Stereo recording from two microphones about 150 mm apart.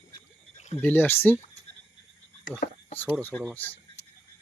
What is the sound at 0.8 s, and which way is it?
Speech, 15° left (ahead or behind).